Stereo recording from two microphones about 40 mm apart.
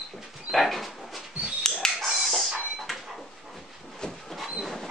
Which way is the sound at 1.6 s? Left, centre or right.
Centre.